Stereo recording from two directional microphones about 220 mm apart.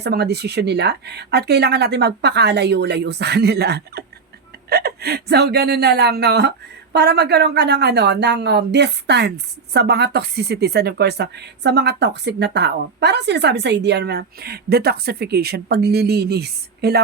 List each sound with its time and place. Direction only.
0.0 s a woman's voice: 50° right (ahead or behind)